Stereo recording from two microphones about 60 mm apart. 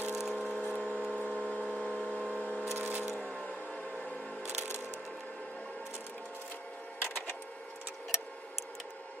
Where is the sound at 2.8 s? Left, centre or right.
Right.